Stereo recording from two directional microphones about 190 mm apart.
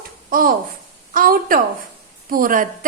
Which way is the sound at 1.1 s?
50° right (ahead or behind).